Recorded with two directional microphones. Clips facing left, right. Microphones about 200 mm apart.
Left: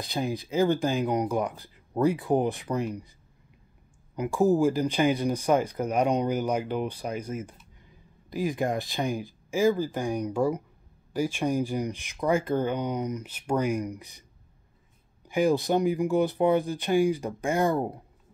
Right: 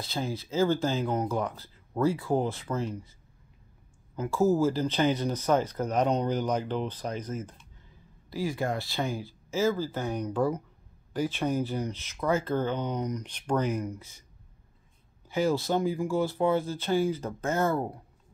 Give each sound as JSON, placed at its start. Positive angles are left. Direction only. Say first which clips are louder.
{"t": 0.0, "sound": "speech", "louder": "left 3 dB", "side_deg": 15}
{"t": 4.1, "sound": "speech", "louder": "left 2 dB", "side_deg": 15}
{"t": 15.2, "sound": "speech", "louder": "left 3 dB", "side_deg": 15}